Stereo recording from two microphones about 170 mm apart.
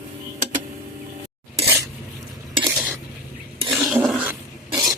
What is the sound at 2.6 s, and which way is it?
Stir, 10° right (ahead or behind).